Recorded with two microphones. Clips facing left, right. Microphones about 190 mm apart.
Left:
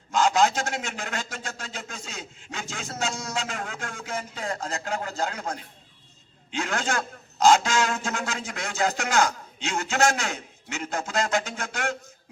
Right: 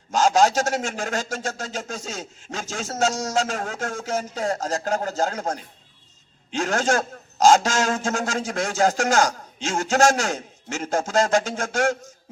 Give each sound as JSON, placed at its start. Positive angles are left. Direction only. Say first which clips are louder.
{"t": 0.1, "sound": "a man's voice", "louder": "right 3 dB", "side_deg": -45}
{"t": 6.6, "sound": "a man's voice", "louder": "right 6 dB", "side_deg": -45}